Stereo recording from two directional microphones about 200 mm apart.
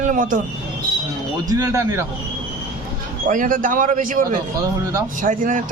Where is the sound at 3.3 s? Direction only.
40° right (ahead or behind).